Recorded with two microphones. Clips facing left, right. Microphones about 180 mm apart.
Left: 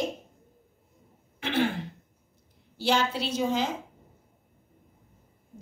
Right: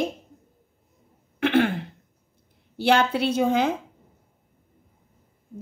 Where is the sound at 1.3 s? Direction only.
55° right (ahead or behind).